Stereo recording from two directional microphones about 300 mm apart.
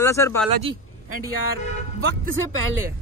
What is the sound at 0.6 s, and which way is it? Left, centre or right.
Speech, centre.